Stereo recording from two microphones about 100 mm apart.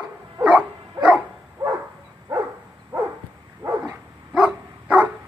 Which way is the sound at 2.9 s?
40° right (ahead or behind).